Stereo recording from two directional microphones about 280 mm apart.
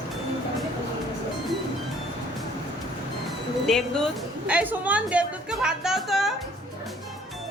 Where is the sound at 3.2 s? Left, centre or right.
Centre.